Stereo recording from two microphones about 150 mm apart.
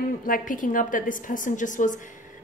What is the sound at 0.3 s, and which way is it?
Speech, 60° left (ahead or behind).